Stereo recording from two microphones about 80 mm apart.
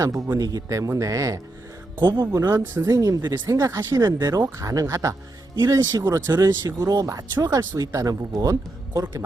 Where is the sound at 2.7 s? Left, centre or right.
Right.